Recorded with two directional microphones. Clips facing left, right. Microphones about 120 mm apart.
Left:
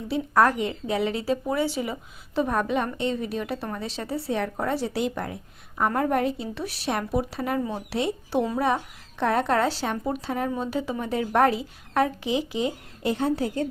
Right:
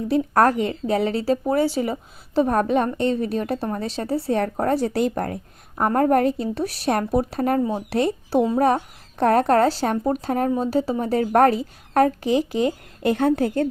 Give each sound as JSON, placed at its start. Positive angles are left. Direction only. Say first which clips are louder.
{"t": 0.1, "sound": "speech", "louder": "right 3 dB", "side_deg": -45}